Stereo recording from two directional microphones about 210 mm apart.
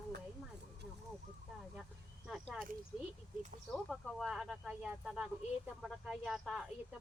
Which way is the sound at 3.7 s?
Centre (ahead or behind).